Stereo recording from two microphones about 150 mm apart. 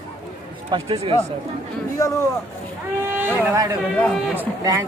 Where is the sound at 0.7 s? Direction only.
35° right (ahead or behind).